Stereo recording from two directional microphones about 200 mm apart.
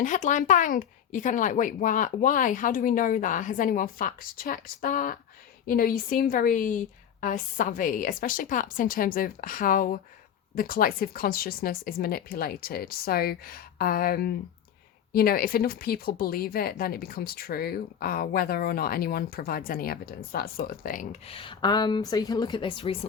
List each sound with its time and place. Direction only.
0.0 s speech: 40° left (ahead or behind)